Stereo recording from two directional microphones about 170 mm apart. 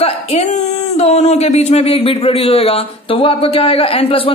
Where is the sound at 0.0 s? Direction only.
40° left (ahead or behind).